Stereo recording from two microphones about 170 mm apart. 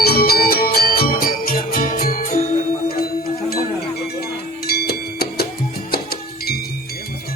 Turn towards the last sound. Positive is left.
turn(degrees=65)  # may be behind; listen again after turning